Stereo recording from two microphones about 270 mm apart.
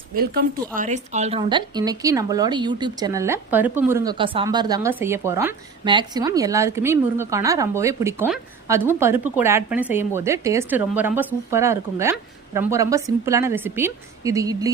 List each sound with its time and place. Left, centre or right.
0.2 s a woman's voice: right; by 14.7 s centre